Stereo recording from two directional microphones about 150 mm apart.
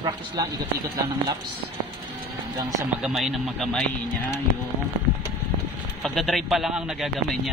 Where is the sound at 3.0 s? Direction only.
5° right (ahead or behind).